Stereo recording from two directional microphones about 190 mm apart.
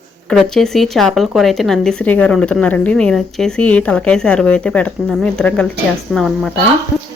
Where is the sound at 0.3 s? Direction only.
Centre (ahead or behind).